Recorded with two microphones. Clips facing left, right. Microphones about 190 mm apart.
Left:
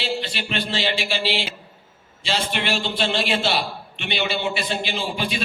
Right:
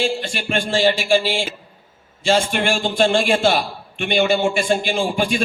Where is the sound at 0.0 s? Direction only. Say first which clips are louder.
Right 5 dB; 50° right (ahead or behind).